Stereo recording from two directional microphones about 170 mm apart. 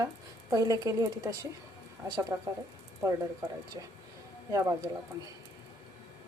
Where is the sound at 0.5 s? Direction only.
20° right (ahead or behind).